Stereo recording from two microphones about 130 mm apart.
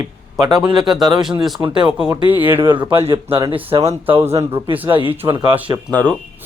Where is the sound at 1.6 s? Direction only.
25° right (ahead or behind).